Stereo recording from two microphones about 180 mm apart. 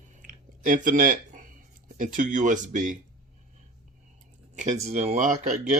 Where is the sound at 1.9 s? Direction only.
45° right (ahead or behind).